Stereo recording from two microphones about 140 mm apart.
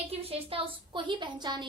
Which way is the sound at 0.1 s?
40° right (ahead or behind).